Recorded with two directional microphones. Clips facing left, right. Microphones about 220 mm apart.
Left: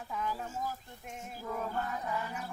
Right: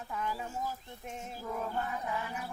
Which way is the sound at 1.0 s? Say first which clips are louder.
Right 2 dB; 20° right (ahead or behind).